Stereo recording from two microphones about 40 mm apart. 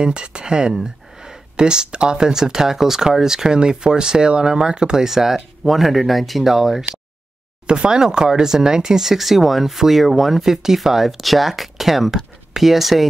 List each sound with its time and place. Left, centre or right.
0.0 s speech: right; by 6.9 s centre
7.6 s speech: right; by 13.1 s centre